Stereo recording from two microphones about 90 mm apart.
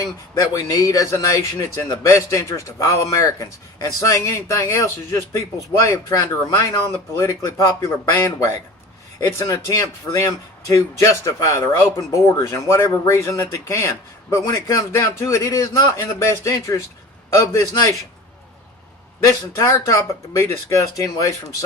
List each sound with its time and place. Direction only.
0.0 s speech: 40° left (ahead or behind)
19.2 s speech: 35° left (ahead or behind)